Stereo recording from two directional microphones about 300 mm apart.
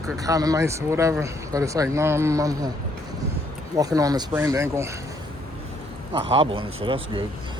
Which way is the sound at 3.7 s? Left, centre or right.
Centre.